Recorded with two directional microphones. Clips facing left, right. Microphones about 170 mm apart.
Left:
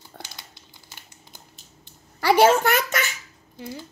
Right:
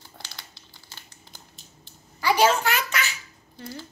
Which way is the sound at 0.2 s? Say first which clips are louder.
Left 5 dB; 65° left (ahead or behind).